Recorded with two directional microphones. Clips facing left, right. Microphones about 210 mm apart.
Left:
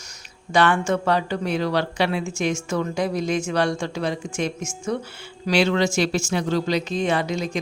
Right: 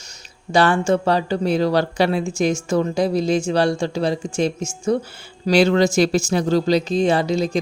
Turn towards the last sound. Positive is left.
turn(degrees=-35)  # may be behind; listen again after turning